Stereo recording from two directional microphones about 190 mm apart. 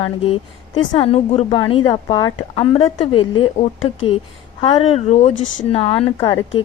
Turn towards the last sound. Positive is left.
turn(degrees=30)  # may be behind; listen again after turning